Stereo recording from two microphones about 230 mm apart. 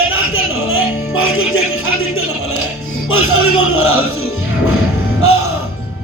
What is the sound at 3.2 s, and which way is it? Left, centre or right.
Music, left.